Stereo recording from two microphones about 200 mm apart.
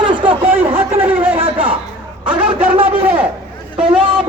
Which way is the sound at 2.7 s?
25° right (ahead or behind).